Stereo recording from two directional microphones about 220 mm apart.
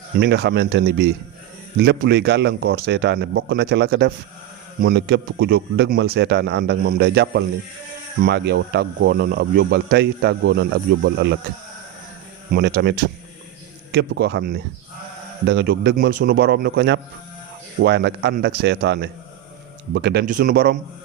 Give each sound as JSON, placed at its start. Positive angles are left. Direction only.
{"t": 0.2, "sound": "speech", "side_deg": -50}
{"t": 12.5, "sound": "speech", "side_deg": -45}
{"t": 13.9, "sound": "speech", "side_deg": -50}